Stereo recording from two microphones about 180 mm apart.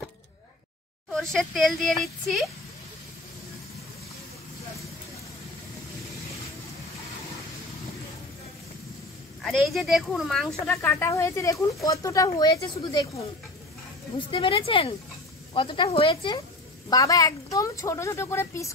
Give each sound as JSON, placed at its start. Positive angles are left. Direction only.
{"t": 1.1, "sound": "speech", "side_deg": 5}
{"t": 9.4, "sound": "speech", "side_deg": 0}
{"t": 10.7, "sound": "speech", "side_deg": 10}
{"t": 14.1, "sound": "speech", "side_deg": 30}